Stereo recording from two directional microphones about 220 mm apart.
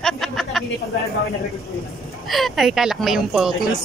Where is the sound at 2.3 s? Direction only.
Centre (ahead or behind).